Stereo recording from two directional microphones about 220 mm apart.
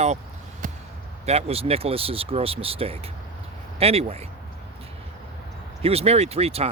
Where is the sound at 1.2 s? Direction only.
25° right (ahead or behind).